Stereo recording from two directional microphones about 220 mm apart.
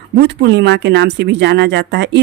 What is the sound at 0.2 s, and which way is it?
Speech, 50° right (ahead or behind).